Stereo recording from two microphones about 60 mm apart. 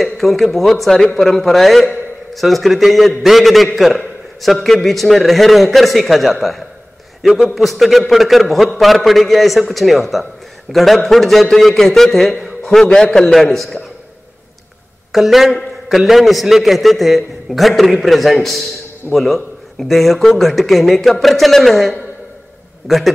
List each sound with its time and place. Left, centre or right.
0.0 s a man's voice: centre
15.1 s a man's voice: centre